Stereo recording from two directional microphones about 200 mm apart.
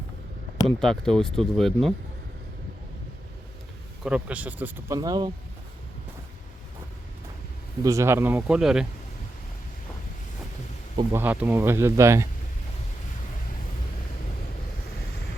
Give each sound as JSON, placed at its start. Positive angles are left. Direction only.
{"t": 0.8, "sound": "speech", "side_deg": 5}
{"t": 4.0, "sound": "speech", "side_deg": -5}
{"t": 4.9, "sound": "speech", "side_deg": -20}
{"t": 7.9, "sound": "speech", "side_deg": -15}
{"t": 11.1, "sound": "speech", "side_deg": -10}